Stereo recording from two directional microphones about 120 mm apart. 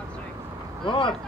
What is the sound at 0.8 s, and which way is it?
Speech, 45° left (ahead or behind).